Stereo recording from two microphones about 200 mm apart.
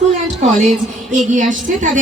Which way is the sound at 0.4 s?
35° right (ahead or behind).